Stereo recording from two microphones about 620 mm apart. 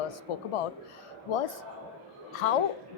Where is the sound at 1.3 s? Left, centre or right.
Left.